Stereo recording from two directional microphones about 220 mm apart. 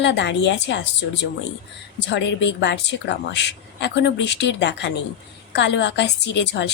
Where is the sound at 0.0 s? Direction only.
55° left (ahead or behind).